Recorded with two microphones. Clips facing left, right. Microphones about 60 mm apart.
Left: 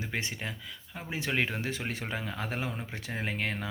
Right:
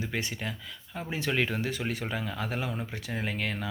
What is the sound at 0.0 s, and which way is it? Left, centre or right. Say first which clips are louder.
Speech: right 2 dB; left.